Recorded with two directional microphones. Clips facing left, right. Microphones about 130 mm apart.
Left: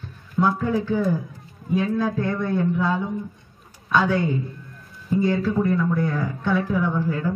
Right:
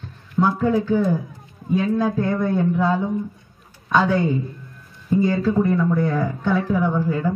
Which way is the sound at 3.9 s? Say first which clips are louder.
Right 2 dB; 25° right (ahead or behind).